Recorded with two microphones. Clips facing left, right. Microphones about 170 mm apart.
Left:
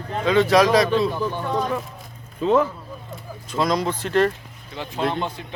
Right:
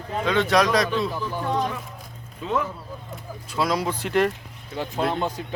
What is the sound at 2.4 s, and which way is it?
Speech, 35° left (ahead or behind).